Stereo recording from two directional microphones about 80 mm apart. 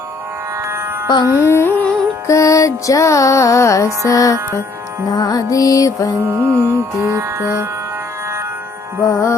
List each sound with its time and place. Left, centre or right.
0.6 s music: right
1.0 s music: left
1.3 s music: left
6.2 s music: right
9.0 s music: left